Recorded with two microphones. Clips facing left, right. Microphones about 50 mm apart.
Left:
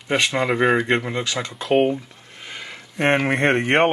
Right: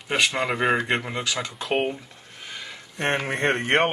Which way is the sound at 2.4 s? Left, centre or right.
Left.